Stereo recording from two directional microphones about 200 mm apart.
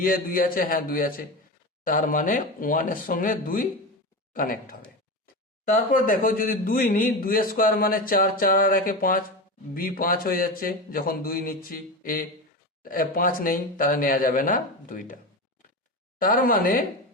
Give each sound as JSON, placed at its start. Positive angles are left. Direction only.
{"t": 0.0, "sound": "a man's voice", "side_deg": 45}
{"t": 5.7, "sound": "a man's voice", "side_deg": 40}